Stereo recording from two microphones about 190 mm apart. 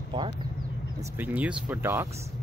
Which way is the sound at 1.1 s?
10° right (ahead or behind).